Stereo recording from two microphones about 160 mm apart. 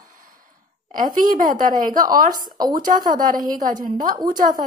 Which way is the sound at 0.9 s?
60° right (ahead or behind).